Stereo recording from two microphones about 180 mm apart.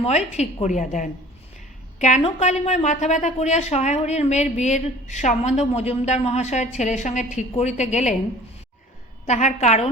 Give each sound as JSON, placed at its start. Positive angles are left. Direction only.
{"t": 0.3, "sound": "a woman's voice", "side_deg": 40}
{"t": 9.2, "sound": "a woman's voice", "side_deg": 40}